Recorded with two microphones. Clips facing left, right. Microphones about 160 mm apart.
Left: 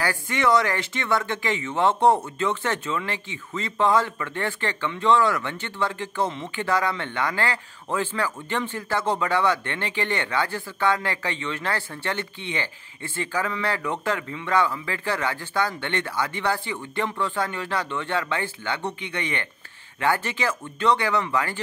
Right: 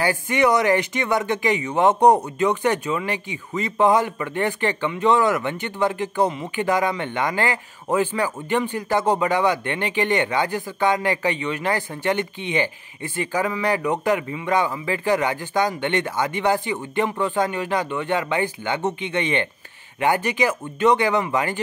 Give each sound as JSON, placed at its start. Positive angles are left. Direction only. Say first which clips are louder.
{"t": 0.0, "sound": "speech", "louder": "right 4 dB", "side_deg": -20}